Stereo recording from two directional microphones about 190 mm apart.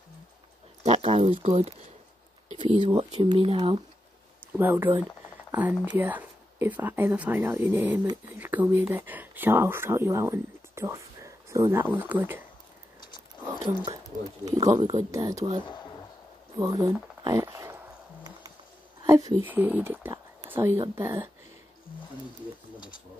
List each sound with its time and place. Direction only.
0.8 s speech: 35° right (ahead or behind)
2.9 s speech: 30° right (ahead or behind)
4.6 s speech: 10° right (ahead or behind)
13.4 s a sound: 15° right (ahead or behind)
14.0 s speech: 20° right (ahead or behind)
17.2 s a sound: 15° right (ahead or behind)
19.0 s speech: 15° right (ahead or behind)